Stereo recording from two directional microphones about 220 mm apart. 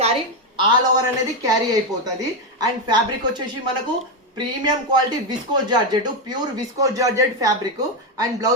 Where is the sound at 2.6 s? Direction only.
20° right (ahead or behind).